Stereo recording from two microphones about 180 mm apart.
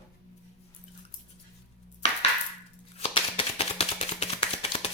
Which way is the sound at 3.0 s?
30° left (ahead or behind).